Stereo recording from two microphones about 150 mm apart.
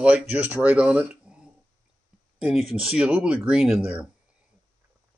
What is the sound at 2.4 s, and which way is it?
Speech, 5° right (ahead or behind).